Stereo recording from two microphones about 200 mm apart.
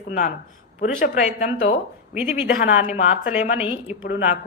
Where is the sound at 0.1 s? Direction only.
45° left (ahead or behind).